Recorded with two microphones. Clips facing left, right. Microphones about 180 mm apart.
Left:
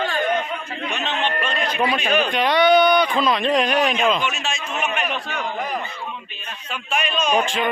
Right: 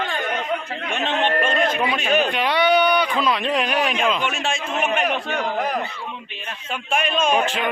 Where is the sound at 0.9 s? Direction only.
50° right (ahead or behind).